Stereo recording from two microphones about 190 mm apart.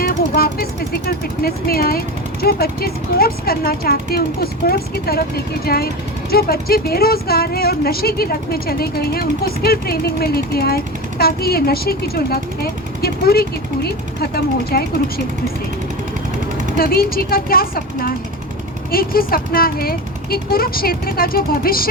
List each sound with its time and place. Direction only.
0.0 s speech: 50° left (ahead or behind)
16.7 s speech: 50° left (ahead or behind)